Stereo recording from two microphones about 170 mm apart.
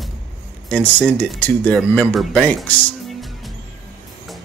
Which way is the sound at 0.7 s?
5° left (ahead or behind).